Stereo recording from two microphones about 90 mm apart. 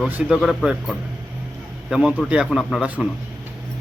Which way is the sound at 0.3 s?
5° right (ahead or behind).